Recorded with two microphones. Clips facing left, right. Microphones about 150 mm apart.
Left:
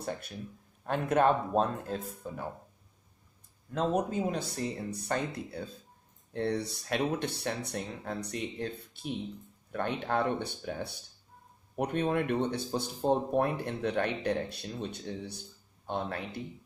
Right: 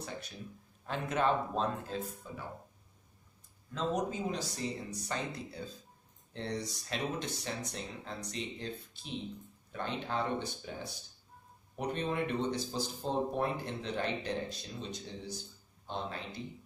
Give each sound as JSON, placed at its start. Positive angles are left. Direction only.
{"t": 0.8, "sound": "speech", "side_deg": 55}
{"t": 3.7, "sound": "speech", "side_deg": 55}